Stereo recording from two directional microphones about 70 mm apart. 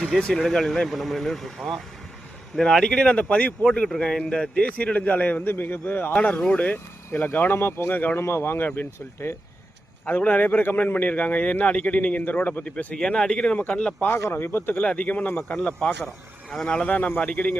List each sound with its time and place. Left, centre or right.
0.2 s speech: centre
3.8 s a man's voice: centre; by 6.1 s left
6.1 s a man's voice: centre
8.2 s a man's voice: left; by 14.1 s centre
14.2 s speech: left
14.8 s speech: centre